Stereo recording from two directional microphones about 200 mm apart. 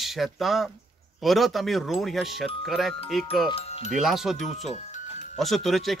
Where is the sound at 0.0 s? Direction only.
Centre (ahead or behind).